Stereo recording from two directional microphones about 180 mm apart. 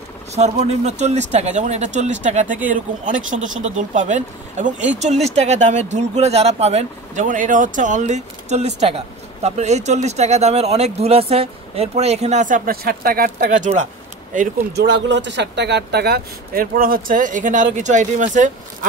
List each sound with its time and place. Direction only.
0.3 s speech: 35° right (ahead or behind)
14.8 s speech: 75° right (ahead or behind); by 18.9 s 45° right (ahead or behind)